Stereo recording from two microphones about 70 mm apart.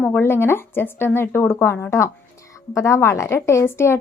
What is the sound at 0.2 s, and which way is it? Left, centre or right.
A woman's voice, left.